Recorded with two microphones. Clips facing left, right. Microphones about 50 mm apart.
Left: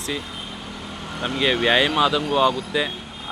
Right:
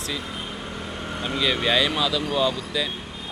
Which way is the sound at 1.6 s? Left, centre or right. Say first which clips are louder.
Left 6 dB; left.